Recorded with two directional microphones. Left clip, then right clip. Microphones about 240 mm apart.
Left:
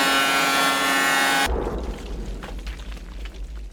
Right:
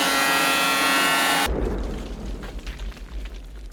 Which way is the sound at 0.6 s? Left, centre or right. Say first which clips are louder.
Even; right.